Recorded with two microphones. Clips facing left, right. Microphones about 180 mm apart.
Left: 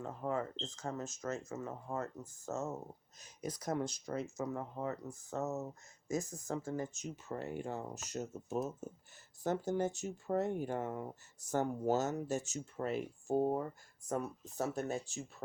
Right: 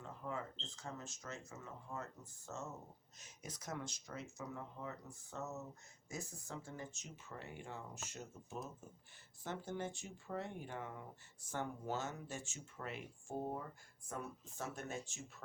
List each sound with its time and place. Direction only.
0.0 s speech: 45° left (ahead or behind)